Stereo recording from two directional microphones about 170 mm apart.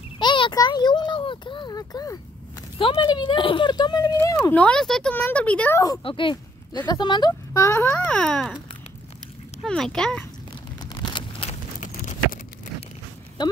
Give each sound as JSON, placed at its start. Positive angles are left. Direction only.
{"t": 0.2, "sound": "a child's voice", "side_deg": 25}
{"t": 4.4, "sound": "speech", "side_deg": 5}
{"t": 6.0, "sound": "speech", "side_deg": 30}
{"t": 8.2, "sound": "speech", "side_deg": 5}
{"t": 9.6, "sound": "speech", "side_deg": 5}
{"t": 10.8, "sound": "a sound", "side_deg": 25}
{"t": 11.8, "sound": "a sound", "side_deg": 45}
{"t": 13.4, "sound": "speech", "side_deg": 25}